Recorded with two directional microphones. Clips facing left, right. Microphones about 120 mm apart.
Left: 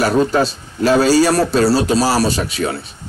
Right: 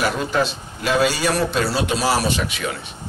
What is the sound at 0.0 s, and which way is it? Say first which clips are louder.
A man's voice: left 6 dB; 40° left (ahead or behind).